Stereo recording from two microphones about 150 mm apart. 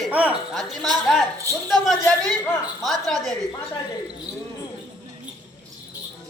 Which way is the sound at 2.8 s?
Centre (ahead or behind).